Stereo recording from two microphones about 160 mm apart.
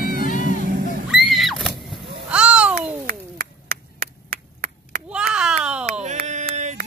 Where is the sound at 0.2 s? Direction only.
55° left (ahead or behind).